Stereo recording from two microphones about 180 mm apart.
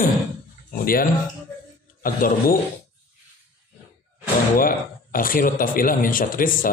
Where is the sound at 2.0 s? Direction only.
50° left (ahead or behind).